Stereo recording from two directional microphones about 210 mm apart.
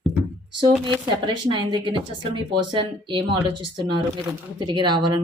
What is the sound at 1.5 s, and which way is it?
Speech, 20° right (ahead or behind).